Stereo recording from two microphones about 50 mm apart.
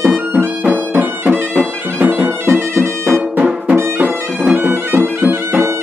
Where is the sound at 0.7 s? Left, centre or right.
Right.